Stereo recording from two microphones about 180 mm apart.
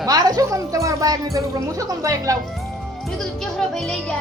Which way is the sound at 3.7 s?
5° left (ahead or behind).